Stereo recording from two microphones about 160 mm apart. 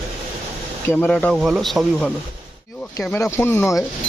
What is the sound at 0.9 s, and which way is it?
Speech, 5° left (ahead or behind).